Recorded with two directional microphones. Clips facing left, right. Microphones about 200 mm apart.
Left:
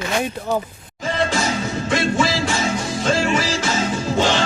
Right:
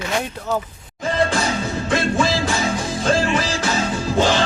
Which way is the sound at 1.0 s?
Centre (ahead or behind).